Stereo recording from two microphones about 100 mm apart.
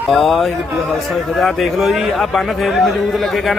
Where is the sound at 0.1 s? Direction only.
Centre (ahead or behind).